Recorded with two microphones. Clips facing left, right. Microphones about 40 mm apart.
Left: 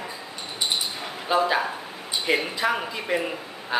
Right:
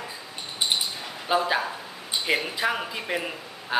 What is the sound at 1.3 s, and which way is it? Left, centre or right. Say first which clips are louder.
A man's voice: left 2 dB; centre.